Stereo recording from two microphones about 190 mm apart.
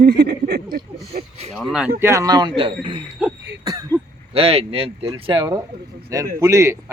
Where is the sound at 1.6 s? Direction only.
Centre (ahead or behind).